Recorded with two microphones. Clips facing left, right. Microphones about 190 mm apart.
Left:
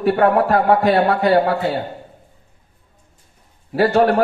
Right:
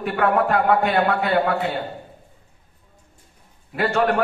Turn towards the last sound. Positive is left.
turn(degrees=35)  # may be behind; listen again after turning